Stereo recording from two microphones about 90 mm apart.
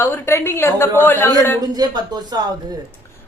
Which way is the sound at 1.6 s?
50° right (ahead or behind).